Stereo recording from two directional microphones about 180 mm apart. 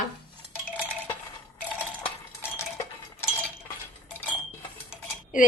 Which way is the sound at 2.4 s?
15° left (ahead or behind).